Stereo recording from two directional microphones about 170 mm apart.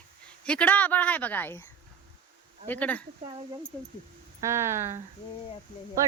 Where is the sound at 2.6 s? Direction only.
10° left (ahead or behind).